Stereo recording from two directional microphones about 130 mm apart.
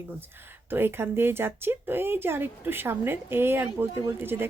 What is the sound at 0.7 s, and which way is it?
Speech, 15° right (ahead or behind).